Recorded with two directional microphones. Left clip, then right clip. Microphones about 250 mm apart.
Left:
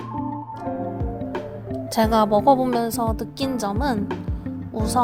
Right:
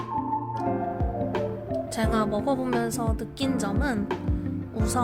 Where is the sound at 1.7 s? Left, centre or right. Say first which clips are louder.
Left 8 dB; left.